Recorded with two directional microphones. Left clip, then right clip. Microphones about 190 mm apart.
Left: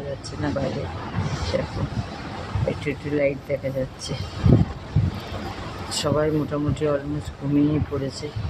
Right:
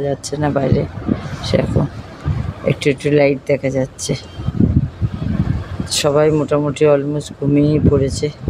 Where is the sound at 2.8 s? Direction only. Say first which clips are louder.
Right 11 dB; 50° right (ahead or behind).